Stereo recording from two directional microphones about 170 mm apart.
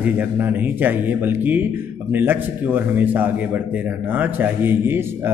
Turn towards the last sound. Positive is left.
turn(degrees=-15)  # may be behind; listen again after turning